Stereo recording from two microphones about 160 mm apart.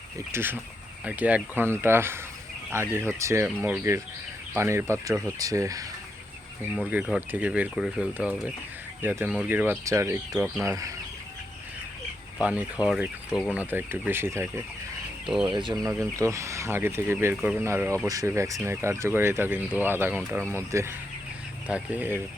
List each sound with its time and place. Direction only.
0.3 s speech: 15° right (ahead or behind)
6.9 s speech: 10° right (ahead or behind)
12.4 s speech: 5° right (ahead or behind)
15.4 s speech: 30° right (ahead or behind)
15.8 s speech: 20° right (ahead or behind)